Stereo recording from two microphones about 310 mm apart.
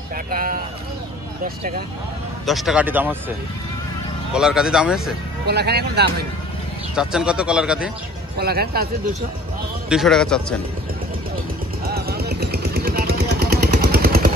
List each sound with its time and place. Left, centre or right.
0.3 s speech: right
2.4 s speech: centre
4.3 s speech: centre
5.5 s speech: right
7.0 s speech: centre
8.4 s speech: right
9.8 s speech: centre
11.8 s vehicle: right